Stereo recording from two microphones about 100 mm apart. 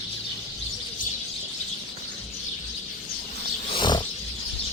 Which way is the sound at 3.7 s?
50° left (ahead or behind).